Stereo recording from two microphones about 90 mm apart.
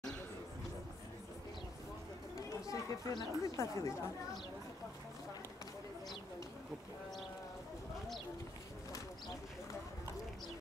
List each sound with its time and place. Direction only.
2.3 s chatter: 40° left (ahead or behind)